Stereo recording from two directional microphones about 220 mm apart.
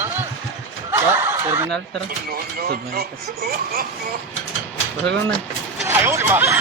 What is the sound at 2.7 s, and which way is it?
Speech, 45° right (ahead or behind).